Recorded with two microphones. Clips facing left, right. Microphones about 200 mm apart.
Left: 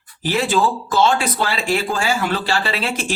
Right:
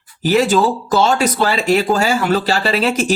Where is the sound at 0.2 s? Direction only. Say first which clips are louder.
Right 5 dB; 40° right (ahead or behind).